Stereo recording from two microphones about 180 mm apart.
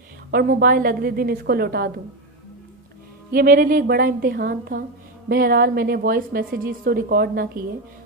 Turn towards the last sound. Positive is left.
turn(degrees=-55)  # may be behind; listen again after turning